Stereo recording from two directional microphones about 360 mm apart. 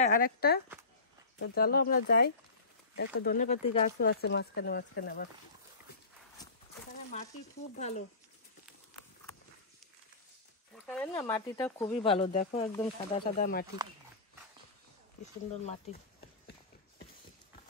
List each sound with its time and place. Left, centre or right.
0.0 s speech: left
7.7 s speech: centre
10.9 s speech: centre; by 13.7 s left